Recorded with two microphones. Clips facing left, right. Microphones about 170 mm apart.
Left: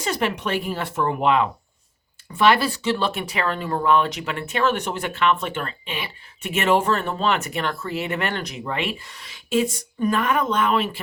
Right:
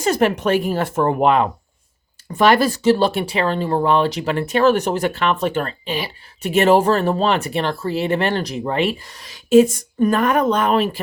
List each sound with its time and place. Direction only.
0.0 s speech: 45° right (ahead or behind)